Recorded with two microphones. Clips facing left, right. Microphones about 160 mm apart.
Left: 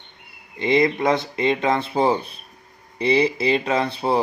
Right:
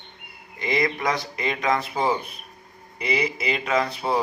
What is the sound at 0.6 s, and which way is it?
A man's voice, 25° left (ahead or behind).